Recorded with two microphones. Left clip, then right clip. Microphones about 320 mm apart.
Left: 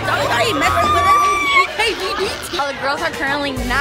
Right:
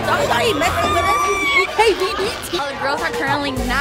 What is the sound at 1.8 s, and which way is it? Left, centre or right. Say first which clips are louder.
Speech: right 4 dB; centre.